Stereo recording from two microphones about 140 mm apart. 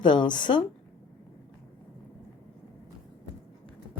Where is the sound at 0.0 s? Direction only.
35° left (ahead or behind).